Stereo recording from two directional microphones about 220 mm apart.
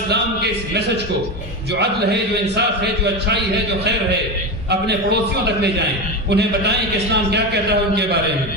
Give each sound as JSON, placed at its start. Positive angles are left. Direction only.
{"t": 0.1, "sound": "speech", "side_deg": -50}
{"t": 2.6, "sound": "a man's voice", "side_deg": -50}
{"t": 6.3, "sound": "a man's voice", "side_deg": -50}